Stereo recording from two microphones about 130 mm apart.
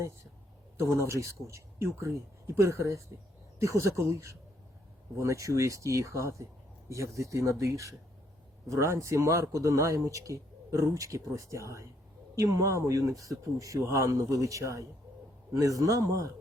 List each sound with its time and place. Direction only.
0.8 s speech: 20° right (ahead or behind)